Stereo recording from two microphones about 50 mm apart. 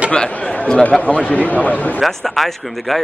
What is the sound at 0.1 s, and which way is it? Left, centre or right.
Chatter, left.